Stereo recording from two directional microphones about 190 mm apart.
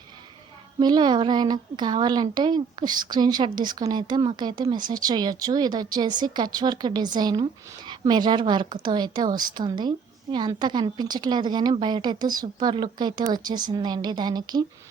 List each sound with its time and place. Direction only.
0.8 s a woman's voice: 20° right (ahead or behind)